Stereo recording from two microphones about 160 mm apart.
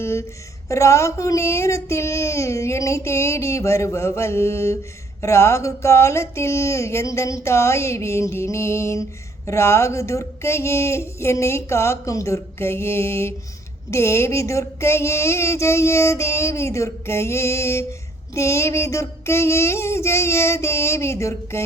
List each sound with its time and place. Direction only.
0.0 s speech: 15° left (ahead or behind)
0.7 s child singing: 20° left (ahead or behind)